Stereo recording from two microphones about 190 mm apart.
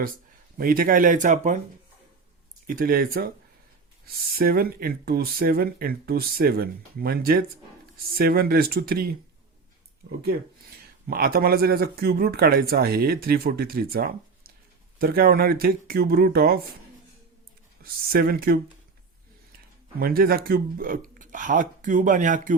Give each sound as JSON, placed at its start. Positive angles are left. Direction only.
{"t": 0.5, "sound": "speech", "side_deg": -50}
{"t": 2.6, "sound": "speech", "side_deg": -50}
{"t": 11.1, "sound": "speech", "side_deg": -50}
{"t": 17.8, "sound": "speech", "side_deg": -50}
{"t": 20.0, "sound": "speech", "side_deg": -50}